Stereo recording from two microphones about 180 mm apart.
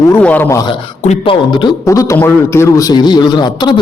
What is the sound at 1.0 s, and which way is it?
A man's voice, 35° left (ahead or behind).